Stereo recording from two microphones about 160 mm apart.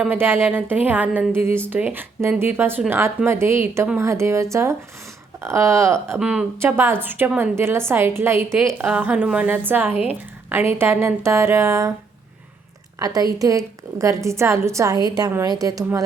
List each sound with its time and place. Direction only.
0.0 s a woman's voice: 10° right (ahead or behind)
6.1 s a woman's voice: 5° right (ahead or behind)
13.0 s a woman's voice: 25° right (ahead or behind)